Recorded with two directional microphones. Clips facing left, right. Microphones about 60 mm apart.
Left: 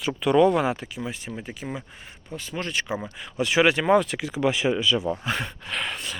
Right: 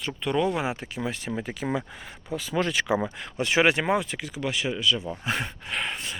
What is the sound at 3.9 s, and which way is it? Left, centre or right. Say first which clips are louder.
Speech: left 6 dB; centre.